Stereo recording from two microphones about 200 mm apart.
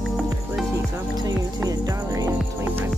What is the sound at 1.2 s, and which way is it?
Music, 20° right (ahead or behind).